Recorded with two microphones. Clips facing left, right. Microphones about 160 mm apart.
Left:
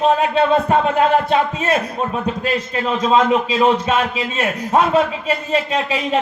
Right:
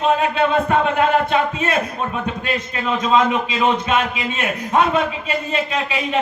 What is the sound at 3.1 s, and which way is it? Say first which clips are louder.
Speech: left 2 dB; 35° left (ahead or behind).